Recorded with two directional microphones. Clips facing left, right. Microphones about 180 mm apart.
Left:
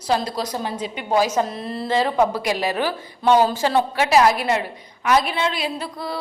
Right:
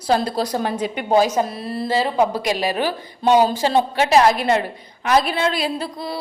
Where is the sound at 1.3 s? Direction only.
10° right (ahead or behind).